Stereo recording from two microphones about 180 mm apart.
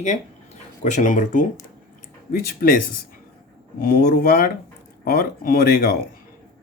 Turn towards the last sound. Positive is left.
turn(degrees=55)  # may be behind; listen again after turning